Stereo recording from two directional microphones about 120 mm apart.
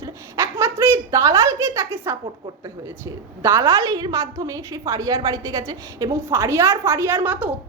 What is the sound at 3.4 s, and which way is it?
A woman's voice, 25° right (ahead or behind).